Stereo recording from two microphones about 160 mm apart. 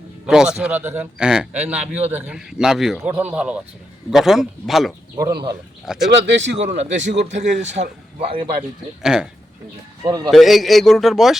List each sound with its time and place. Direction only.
0.3 s a man's voice: 5° right (ahead or behind)
5.1 s speech: 25° right (ahead or behind)
5.8 s a man's voice: centre (ahead or behind)
6.2 s speech: 90° right
6.6 s a man's voice: 45° right (ahead or behind)
6.9 s speech: 90° right
7.3 s a man's voice: 50° right (ahead or behind)
9.0 s a man's voice: 5° right (ahead or behind)
10.0 s speech: 20° right (ahead or behind)
10.2 s a man's voice: centre (ahead or behind)